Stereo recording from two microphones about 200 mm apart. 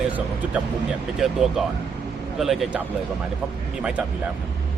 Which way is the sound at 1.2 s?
Centre (ahead or behind).